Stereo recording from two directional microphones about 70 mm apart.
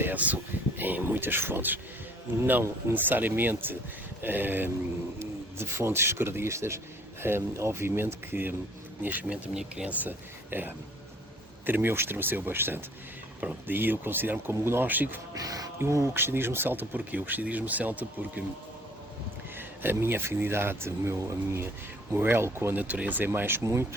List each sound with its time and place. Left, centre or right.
0.0 s speech: right
9.3 s speech: centre
9.9 s speech: right
15.4 s speech: right
15.8 s speech: right
16.1 s speech: right
19.5 s speech: right